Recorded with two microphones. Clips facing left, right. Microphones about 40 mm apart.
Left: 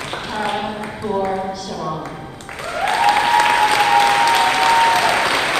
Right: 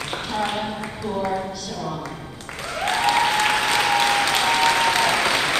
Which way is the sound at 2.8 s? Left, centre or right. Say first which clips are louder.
Left 4 dB; centre.